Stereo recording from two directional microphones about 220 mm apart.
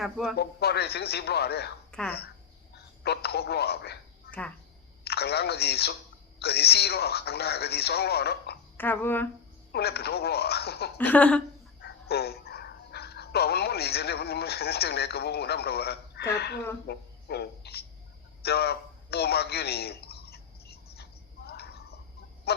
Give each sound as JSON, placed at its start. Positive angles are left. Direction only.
{"t": 0.0, "sound": "a man's voice", "side_deg": 0}
{"t": 0.3, "sound": "speech", "side_deg": 45}
{"t": 1.9, "sound": "a sound", "side_deg": 5}
{"t": 3.0, "sound": "speech", "side_deg": 45}
{"t": 4.3, "sound": "speech", "side_deg": 5}
{"t": 5.0, "sound": "speech", "side_deg": 45}
{"t": 8.8, "sound": "speech", "side_deg": 10}
{"t": 9.7, "sound": "speech", "side_deg": 45}
{"t": 10.9, "sound": "speech", "side_deg": 10}
{"t": 11.8, "sound": "speech", "side_deg": 45}
{"t": 18.4, "sound": "a sound", "side_deg": 45}
{"t": 22.5, "sound": "goose", "side_deg": 45}